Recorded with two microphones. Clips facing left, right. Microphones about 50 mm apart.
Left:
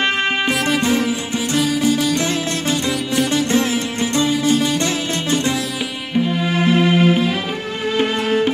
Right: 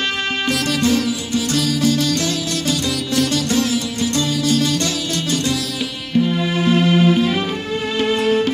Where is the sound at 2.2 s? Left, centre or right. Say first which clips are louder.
Left 1 dB; left.